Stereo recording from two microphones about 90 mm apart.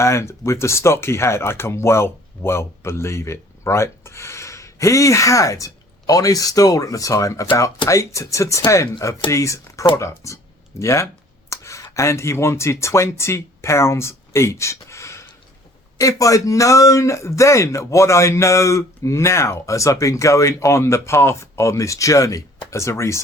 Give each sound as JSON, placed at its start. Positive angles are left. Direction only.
{"t": 0.0, "sound": "speech", "side_deg": 30}